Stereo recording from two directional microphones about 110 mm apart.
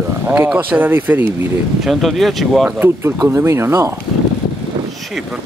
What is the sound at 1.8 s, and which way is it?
Speech, centre (ahead or behind).